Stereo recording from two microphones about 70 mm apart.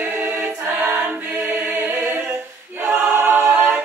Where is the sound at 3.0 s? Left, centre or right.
Right.